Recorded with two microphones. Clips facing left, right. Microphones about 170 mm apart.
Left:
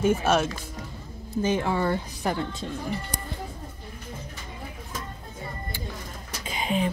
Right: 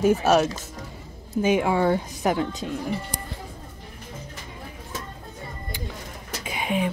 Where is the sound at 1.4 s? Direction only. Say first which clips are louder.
Right 4 dB; 10° right (ahead or behind).